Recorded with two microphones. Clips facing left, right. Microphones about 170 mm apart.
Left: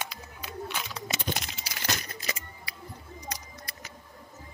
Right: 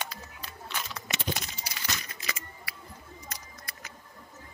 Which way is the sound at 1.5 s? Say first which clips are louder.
Left 4 dB; 60° left (ahead or behind).